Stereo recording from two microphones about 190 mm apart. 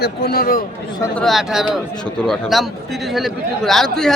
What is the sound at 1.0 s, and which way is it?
A man's voice, 5° left (ahead or behind).